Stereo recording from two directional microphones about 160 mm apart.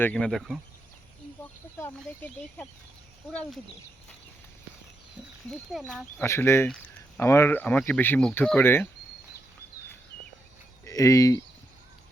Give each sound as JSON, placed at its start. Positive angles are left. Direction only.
{"t": 0.0, "sound": "speech", "side_deg": 5}
{"t": 1.8, "sound": "speech", "side_deg": 10}
{"t": 5.5, "sound": "speech", "side_deg": 5}
{"t": 6.2, "sound": "speech", "side_deg": 15}
{"t": 10.8, "sound": "speech", "side_deg": 20}